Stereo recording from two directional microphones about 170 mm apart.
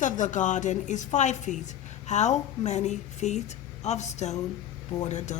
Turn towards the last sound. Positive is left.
turn(degrees=45)  # may be behind; listen again after turning